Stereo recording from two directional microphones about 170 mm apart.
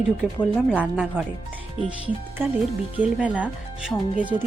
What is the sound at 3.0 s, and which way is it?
Speech, 10° right (ahead or behind).